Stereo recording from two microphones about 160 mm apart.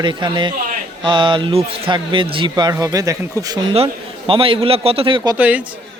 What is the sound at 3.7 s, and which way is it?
A man's voice, 35° right (ahead or behind).